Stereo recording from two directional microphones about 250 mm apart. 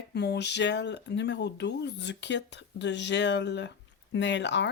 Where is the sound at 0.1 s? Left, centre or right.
Left.